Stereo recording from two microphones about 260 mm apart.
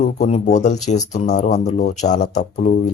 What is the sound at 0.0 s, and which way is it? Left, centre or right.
Speech, left.